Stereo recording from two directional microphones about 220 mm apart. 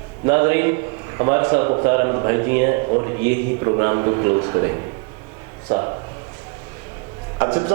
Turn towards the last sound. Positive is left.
turn(degrees=-25)  # may be behind; listen again after turning